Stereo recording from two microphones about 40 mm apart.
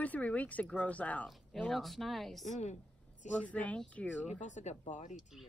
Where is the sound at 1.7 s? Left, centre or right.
Centre.